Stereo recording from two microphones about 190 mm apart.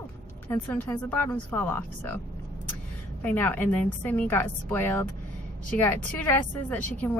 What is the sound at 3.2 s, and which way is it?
A woman's voice, 10° left (ahead or behind).